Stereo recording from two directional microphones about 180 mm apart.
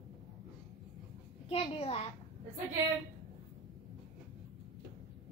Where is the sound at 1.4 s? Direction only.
35° left (ahead or behind).